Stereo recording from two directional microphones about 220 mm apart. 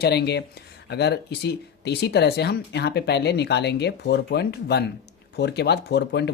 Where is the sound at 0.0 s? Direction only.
50° left (ahead or behind).